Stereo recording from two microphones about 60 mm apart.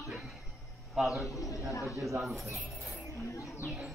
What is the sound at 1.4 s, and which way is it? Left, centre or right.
Speech, left.